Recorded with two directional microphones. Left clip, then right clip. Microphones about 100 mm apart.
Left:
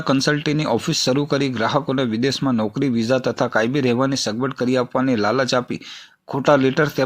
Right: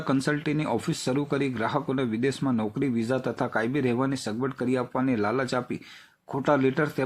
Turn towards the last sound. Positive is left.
turn(degrees=30)  # may be behind; listen again after turning